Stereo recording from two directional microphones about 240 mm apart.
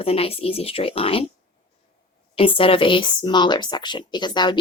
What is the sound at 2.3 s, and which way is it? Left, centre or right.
A woman's voice, left.